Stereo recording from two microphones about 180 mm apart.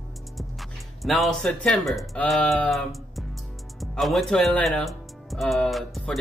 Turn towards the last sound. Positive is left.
turn(degrees=0)  # may be behind; listen again after turning